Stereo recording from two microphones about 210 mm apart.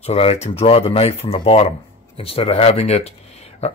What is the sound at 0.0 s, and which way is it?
Speech, 30° left (ahead or behind).